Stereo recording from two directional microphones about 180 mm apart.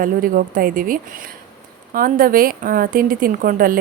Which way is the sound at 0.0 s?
50° right (ahead or behind).